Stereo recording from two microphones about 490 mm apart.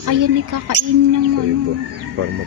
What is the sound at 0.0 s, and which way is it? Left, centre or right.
Speech, right.